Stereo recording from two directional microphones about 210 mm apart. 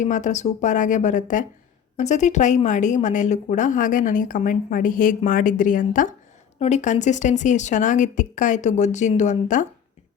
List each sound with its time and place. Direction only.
0.0 s speech: 35° left (ahead or behind)